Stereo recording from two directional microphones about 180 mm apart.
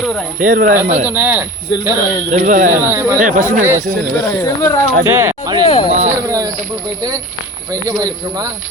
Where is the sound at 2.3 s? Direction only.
45° right (ahead or behind).